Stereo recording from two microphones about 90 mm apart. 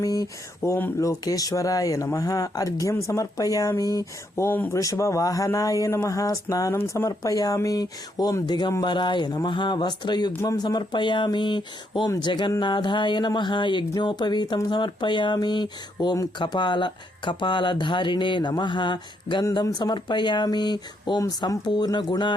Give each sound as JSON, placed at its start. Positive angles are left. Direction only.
{"t": 0.0, "sound": "speech", "side_deg": 40}
{"t": 8.4, "sound": "speech", "side_deg": 55}
{"t": 21.2, "sound": "speech", "side_deg": 40}